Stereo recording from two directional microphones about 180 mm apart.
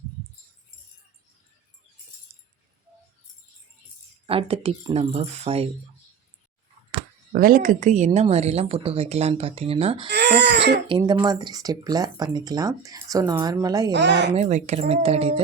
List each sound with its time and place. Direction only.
4.3 s speech: 30° right (ahead or behind)
7.3 s speech: 50° right (ahead or behind); by 10.1 s 30° right (ahead or behind)
10.1 s a sound: 70° right (ahead or behind)
10.8 s speech: 25° right (ahead or behind)
13.9 s speech: 75° right (ahead or behind)
14.3 s speech: 40° right (ahead or behind)